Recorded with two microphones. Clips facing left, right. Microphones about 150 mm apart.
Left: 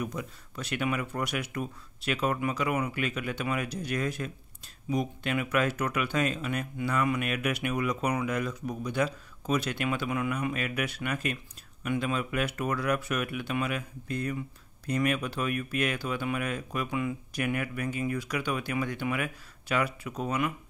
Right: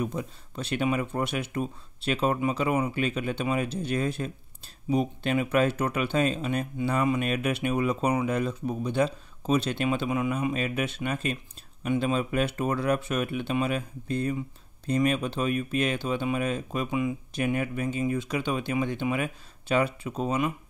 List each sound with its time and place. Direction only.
0.0 s speech: 30° right (ahead or behind)